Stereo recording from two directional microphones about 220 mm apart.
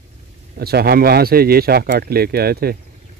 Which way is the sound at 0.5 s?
45° right (ahead or behind).